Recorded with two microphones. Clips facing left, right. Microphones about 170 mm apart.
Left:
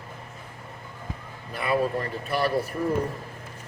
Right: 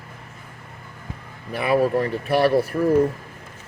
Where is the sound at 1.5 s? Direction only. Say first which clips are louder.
Right 6 dB; 70° right (ahead or behind).